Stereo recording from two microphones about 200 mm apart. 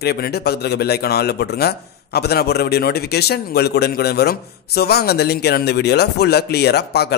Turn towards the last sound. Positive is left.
turn(degrees=55)  # may be behind; listen again after turning